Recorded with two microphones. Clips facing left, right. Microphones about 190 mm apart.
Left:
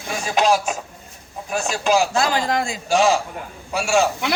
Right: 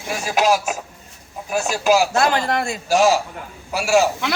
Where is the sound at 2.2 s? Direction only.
60° right (ahead or behind).